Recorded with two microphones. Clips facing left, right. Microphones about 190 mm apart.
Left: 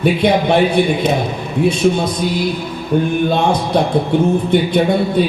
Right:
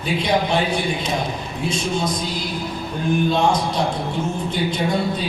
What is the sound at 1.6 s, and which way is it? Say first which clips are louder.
A man's voice: left 9 dB; 60° left (ahead or behind).